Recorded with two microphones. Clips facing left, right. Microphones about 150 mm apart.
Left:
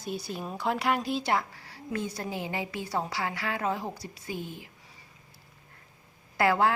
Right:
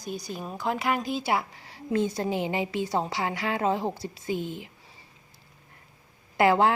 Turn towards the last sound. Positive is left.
turn(degrees=-20)  # may be behind; listen again after turning